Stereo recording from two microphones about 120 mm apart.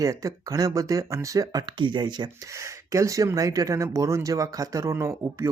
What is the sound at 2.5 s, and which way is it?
Speech, 25° right (ahead or behind).